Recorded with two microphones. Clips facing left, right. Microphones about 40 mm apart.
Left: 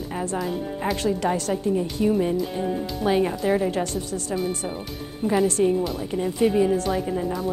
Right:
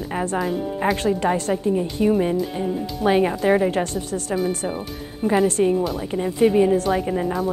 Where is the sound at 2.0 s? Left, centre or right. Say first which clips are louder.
Right 3 dB; centre.